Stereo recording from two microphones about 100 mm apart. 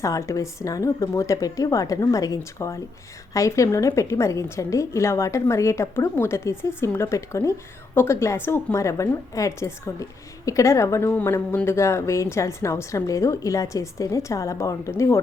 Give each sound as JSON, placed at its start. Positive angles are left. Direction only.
{"t": 0.0, "sound": "a woman's voice", "side_deg": 30}